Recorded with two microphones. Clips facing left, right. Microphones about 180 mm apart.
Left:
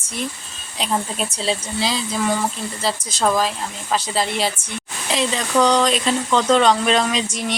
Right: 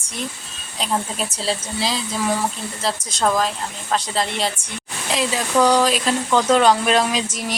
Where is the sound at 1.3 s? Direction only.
Centre (ahead or behind).